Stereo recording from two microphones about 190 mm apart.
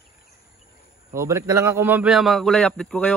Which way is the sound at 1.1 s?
15° right (ahead or behind).